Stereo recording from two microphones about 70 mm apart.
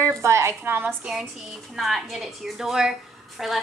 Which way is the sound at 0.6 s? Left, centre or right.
Right.